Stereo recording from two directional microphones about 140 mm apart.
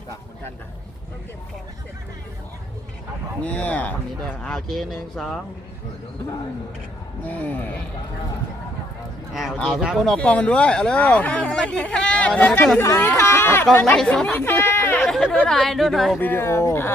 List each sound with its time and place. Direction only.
3.4 s speech: 10° left (ahead or behind)
7.3 s speech: 10° left (ahead or behind)
9.6 s speech: centre (ahead or behind); by 15.0 s 15° left (ahead or behind)
15.0 s speech: centre (ahead or behind)
16.2 s speech: 15° left (ahead or behind)